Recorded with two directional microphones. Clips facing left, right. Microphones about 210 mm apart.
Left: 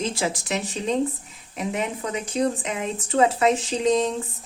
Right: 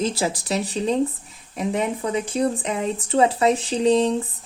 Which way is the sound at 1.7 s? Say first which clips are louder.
Right 4 dB; 30° right (ahead or behind).